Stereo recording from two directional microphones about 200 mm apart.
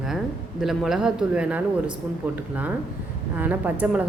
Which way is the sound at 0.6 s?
Centre (ahead or behind).